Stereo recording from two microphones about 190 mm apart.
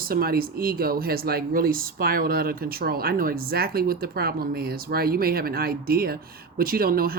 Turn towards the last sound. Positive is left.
turn(degrees=-50)  # may be behind; listen again after turning